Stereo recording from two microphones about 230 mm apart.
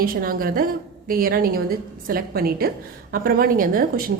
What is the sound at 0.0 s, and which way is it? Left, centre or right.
A woman's voice, right.